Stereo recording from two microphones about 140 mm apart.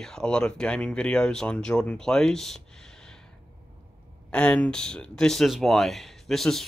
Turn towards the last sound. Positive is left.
turn(degrees=0)  # may be behind; listen again after turning